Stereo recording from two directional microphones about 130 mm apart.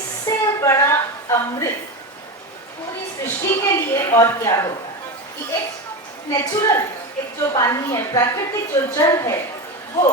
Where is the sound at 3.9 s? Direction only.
25° left (ahead or behind).